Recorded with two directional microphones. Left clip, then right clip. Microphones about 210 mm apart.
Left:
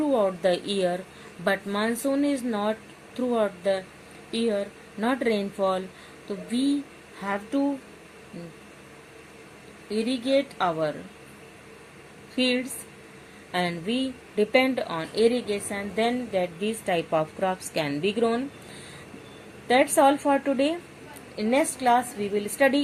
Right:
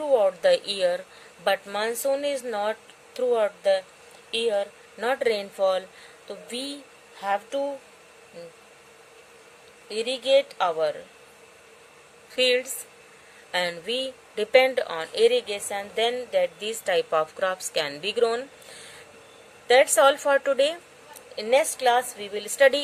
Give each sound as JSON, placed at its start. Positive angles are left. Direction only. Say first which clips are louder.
{"t": 0.1, "sound": "a woman's voice", "louder": "right 6 dB", "side_deg": -40}
{"t": 9.9, "sound": "a woman's voice", "louder": "right 3 dB", "side_deg": -40}
{"t": 12.4, "sound": "a woman's voice", "louder": "right 4 dB", "side_deg": -40}
{"t": 19.6, "sound": "a woman's voice", "louder": "right 2 dB", "side_deg": -40}